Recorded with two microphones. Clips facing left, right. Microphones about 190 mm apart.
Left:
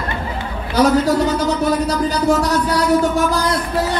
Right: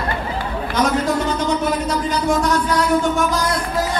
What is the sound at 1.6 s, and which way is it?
Speech, 35° left (ahead or behind).